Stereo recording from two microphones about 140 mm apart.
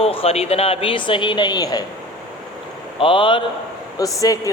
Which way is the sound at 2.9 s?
40° left (ahead or behind).